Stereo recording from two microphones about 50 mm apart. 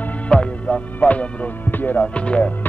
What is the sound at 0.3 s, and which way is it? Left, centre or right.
Music, left.